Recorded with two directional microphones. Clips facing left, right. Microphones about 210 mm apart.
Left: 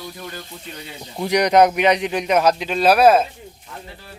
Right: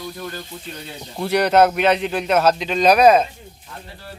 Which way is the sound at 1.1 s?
15° left (ahead or behind).